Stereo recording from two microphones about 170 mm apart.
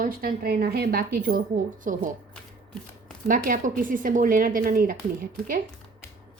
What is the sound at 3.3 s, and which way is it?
A woman's voice, 55° right (ahead or behind).